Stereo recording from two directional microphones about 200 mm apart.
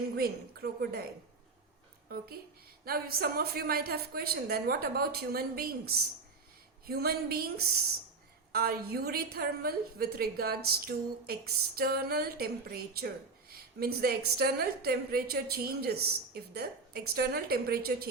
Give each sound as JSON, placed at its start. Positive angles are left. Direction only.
{"t": 0.2, "sound": "a woman's voice", "side_deg": -50}
{"t": 2.1, "sound": "a woman's voice", "side_deg": -50}